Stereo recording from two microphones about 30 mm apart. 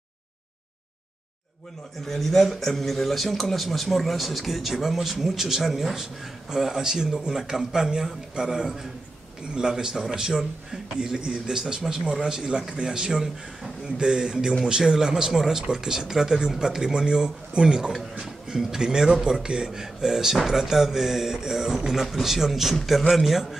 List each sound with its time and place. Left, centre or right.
2.0 s a man's voice: centre; by 11.5 s right
11.5 s speech: centre
12.1 s a man's voice: right
19.7 s speech: centre